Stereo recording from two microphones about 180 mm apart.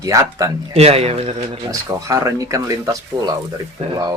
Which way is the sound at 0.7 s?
35° right (ahead or behind).